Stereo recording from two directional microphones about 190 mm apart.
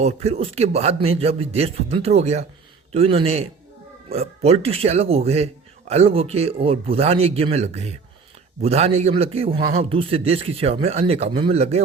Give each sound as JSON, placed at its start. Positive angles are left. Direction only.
{"t": 0.0, "sound": "a man's voice", "side_deg": -35}